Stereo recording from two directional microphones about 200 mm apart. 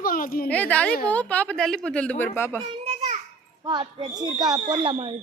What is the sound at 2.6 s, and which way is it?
Children playing, 30° right (ahead or behind).